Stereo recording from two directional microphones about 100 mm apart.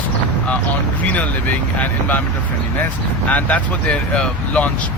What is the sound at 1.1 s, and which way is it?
Speech, 15° left (ahead or behind).